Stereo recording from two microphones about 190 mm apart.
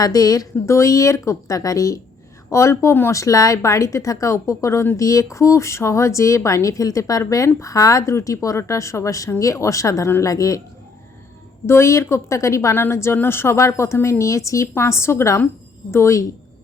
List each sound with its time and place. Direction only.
0.0 s speech: 20° left (ahead or behind)
11.6 s speech: 15° left (ahead or behind)